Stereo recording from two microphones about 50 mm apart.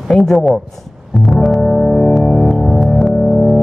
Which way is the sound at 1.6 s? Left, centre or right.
Centre.